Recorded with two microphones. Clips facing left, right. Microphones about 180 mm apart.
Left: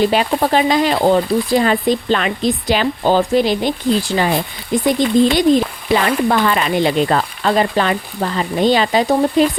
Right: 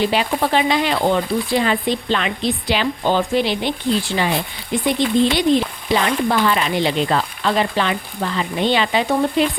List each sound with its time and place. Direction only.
0.0 s speech: 45° left (ahead or behind)